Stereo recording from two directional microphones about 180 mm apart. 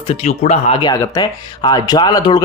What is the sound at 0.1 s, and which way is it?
Speech, 35° left (ahead or behind).